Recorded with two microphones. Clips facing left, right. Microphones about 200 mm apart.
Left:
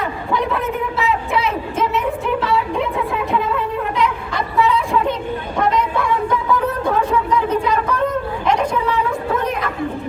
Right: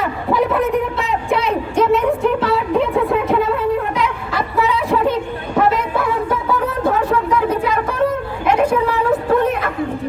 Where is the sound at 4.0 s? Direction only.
Centre (ahead or behind).